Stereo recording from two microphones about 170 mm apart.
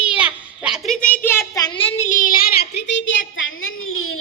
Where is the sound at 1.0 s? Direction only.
10° left (ahead or behind); by 3.2 s 90° left.